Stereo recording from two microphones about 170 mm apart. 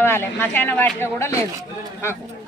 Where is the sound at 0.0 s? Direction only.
15° left (ahead or behind).